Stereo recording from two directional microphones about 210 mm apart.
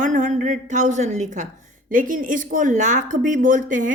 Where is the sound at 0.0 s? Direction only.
35° right (ahead or behind).